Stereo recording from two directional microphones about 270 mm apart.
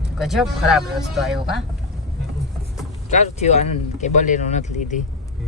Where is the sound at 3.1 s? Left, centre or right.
Left.